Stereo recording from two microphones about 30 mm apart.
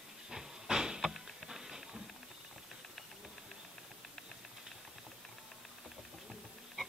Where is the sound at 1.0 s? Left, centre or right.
Centre.